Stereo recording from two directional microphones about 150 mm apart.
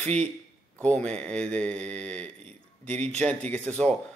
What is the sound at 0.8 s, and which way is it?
A man's voice, 5° left (ahead or behind).